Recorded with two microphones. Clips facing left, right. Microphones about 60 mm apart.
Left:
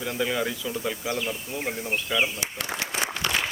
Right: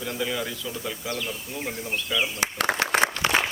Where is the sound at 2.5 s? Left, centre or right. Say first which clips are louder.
Right 10 dB; right.